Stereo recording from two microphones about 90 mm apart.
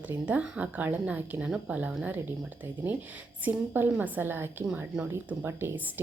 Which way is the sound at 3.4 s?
20° right (ahead or behind).